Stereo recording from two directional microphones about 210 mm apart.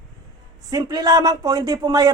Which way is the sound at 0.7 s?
20° right (ahead or behind).